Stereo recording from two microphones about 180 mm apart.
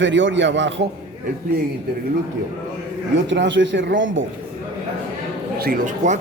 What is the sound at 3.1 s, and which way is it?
A man's voice, 85° right.